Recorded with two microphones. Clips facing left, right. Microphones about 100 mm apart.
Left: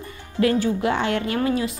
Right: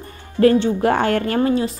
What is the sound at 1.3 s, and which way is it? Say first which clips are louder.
Speech: right 4 dB; 35° right (ahead or behind).